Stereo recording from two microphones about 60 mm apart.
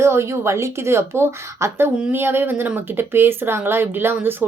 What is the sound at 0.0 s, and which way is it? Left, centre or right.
A woman's voice, right.